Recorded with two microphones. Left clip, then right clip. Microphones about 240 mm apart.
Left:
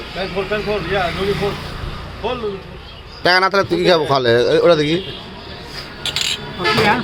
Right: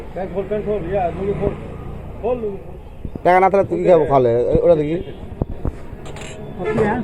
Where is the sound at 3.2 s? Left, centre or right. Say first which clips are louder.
Right 1 dB; left.